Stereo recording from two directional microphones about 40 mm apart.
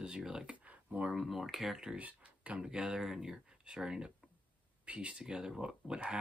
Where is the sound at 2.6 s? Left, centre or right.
Right.